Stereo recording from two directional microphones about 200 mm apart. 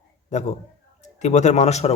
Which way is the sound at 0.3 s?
35° left (ahead or behind).